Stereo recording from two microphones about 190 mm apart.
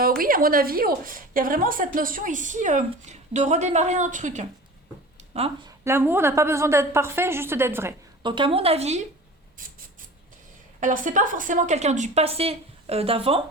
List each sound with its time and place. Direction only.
0.2 s a woman's voice: 50° right (ahead or behind)
5.6 s a woman's voice: 15° right (ahead or behind)
8.2 s speech: 25° right (ahead or behind)
10.8 s speech: 45° right (ahead or behind)